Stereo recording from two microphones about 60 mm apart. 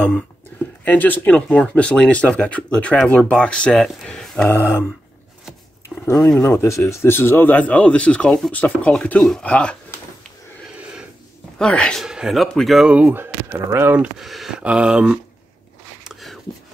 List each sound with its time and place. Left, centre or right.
0.8 s speech: left; by 4.5 s centre
6.0 s speech: left
7.4 s speech: left
11.5 s speech: centre
12.0 s speech: centre
12.8 s speech: right
13.1 s speech: right
14.1 s speech: centre
14.6 s speech: centre
16.0 s a sound: centre